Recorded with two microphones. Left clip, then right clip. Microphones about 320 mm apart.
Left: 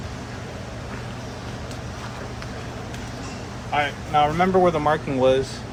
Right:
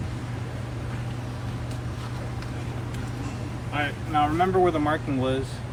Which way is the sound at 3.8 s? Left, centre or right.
Centre.